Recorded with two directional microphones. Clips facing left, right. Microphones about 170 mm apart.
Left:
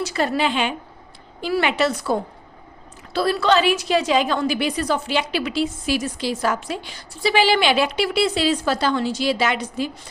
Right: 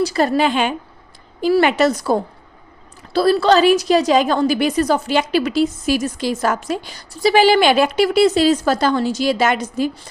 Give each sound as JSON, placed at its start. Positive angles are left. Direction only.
{"t": 0.0, "sound": "a woman's voice", "side_deg": -40}